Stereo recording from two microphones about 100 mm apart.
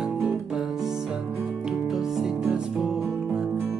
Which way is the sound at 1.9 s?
5° right (ahead or behind).